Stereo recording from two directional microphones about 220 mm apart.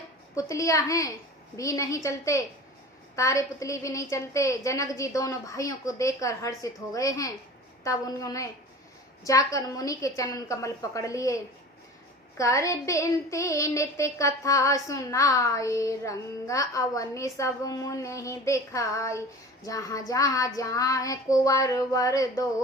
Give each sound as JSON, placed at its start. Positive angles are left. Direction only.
{"t": 0.3, "sound": "child singing", "side_deg": 15}
{"t": 12.4, "sound": "child singing", "side_deg": 15}